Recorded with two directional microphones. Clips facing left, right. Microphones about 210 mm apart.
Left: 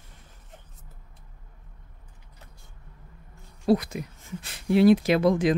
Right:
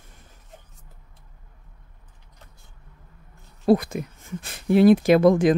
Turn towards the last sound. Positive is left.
turn(degrees=-50)  # may be behind; listen again after turning